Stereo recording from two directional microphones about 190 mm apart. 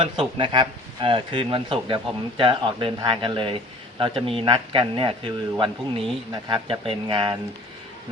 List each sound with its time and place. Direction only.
0.0 s a man's voice: 25° right (ahead or behind)